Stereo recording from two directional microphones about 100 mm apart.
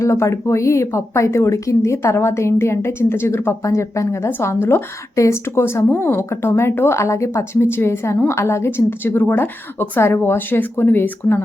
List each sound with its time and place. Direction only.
0.0 s a woman's voice: 30° left (ahead or behind)